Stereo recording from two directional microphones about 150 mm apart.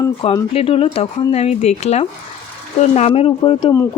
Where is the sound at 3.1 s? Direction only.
35° left (ahead or behind).